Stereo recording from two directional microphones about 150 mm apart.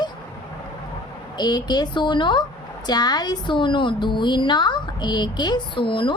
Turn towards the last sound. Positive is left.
turn(degrees=35)  # may be behind; listen again after turning